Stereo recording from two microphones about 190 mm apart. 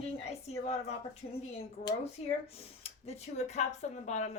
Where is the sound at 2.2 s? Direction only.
35° left (ahead or behind).